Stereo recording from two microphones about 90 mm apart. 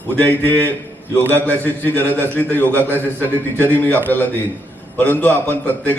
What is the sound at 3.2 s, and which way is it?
Speech, 20° left (ahead or behind).